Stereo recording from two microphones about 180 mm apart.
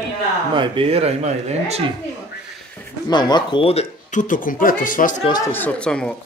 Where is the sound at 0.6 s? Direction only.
30° right (ahead or behind).